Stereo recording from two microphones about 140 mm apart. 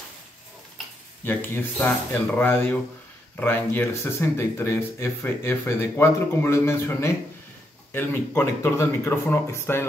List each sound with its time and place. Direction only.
1.2 s speech: 15° left (ahead or behind)